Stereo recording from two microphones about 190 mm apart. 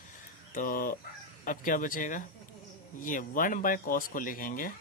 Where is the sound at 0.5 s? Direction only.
45° left (ahead or behind).